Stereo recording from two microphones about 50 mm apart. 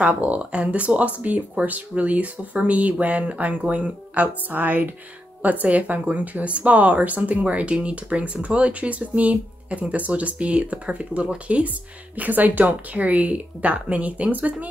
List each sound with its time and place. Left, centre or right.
0.0 s speech: right
12.2 s speech: right